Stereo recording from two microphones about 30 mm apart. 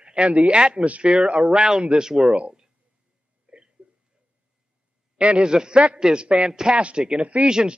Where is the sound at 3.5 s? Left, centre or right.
Right.